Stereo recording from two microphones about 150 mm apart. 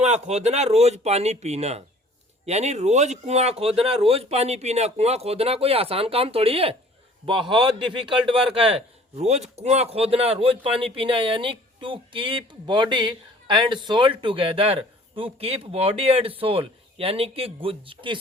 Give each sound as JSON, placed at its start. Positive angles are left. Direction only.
{"t": 0.0, "sound": "a man's voice", "side_deg": -50}